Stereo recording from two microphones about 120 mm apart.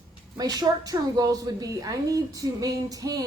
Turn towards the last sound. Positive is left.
turn(degrees=-30)  # may be behind; listen again after turning